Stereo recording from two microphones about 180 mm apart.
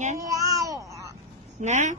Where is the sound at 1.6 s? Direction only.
40° right (ahead or behind).